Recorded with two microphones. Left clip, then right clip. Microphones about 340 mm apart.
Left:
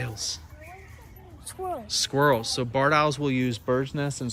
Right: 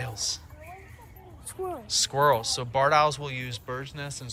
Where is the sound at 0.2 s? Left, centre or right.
Centre.